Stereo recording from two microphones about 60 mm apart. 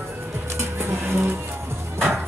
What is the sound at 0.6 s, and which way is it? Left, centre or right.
Music, right.